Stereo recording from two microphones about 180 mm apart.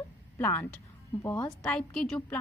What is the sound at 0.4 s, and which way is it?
A woman's voice, 10° left (ahead or behind).